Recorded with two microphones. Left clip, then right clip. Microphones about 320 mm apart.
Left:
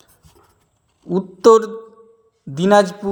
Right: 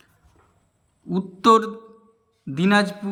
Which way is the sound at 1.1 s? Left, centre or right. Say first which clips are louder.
Left 5 dB; centre.